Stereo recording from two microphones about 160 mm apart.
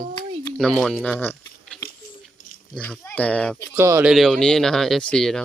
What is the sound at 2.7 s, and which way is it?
Speech, 10° left (ahead or behind).